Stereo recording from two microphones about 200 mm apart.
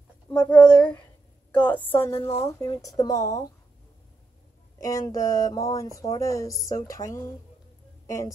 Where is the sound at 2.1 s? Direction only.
30° left (ahead or behind).